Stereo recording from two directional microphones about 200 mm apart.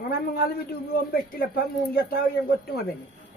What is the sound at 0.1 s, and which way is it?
A man's voice, 55° left (ahead or behind).